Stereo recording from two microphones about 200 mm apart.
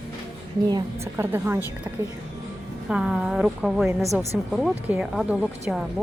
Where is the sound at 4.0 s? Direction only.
15° right (ahead or behind).